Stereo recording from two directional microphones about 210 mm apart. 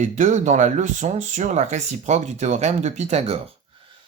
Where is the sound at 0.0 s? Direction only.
35° right (ahead or behind).